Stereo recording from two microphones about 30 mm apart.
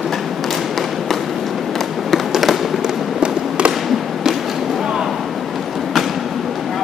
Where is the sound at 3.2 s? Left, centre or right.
Right.